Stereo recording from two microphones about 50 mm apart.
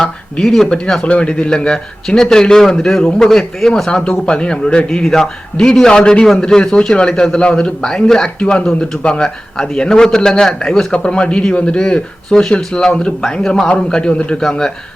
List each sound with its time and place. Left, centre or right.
0.0 s a man's voice: centre